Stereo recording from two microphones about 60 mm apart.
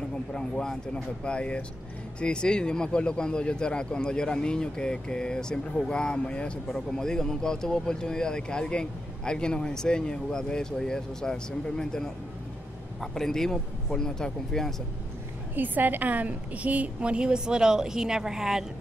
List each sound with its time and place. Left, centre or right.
0.3 s speech: centre
15.5 s a woman's voice: right; by 18.7 s centre